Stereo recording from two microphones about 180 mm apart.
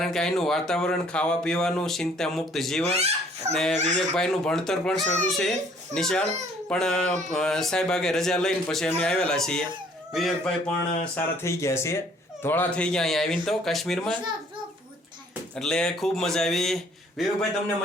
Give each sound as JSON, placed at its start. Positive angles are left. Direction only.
{"t": 0.0, "sound": "speech", "side_deg": 5}
{"t": 2.8, "sound": "speech", "side_deg": -35}
{"t": 3.5, "sound": "speech", "side_deg": 5}
{"t": 11.1, "sound": "speech", "side_deg": 15}
{"t": 15.5, "sound": "speech", "side_deg": 5}